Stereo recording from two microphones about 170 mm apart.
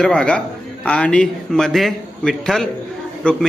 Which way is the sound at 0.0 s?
5° left (ahead or behind).